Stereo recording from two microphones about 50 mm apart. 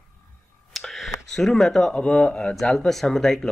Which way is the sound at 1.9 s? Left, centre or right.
Centre.